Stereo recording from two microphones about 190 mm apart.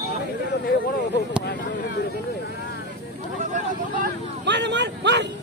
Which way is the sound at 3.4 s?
40° right (ahead or behind).